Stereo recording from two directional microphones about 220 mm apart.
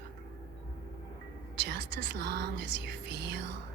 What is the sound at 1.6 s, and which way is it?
Speech, 55° right (ahead or behind).